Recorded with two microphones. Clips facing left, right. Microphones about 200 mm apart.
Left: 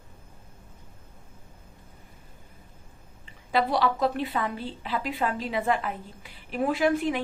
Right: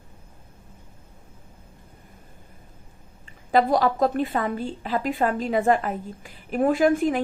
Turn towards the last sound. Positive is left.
turn(degrees=-45)  # may be behind; listen again after turning